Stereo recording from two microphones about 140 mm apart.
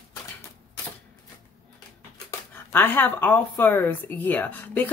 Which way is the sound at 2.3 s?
15° left (ahead or behind).